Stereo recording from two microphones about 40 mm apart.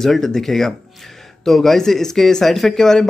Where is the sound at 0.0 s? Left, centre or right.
Centre.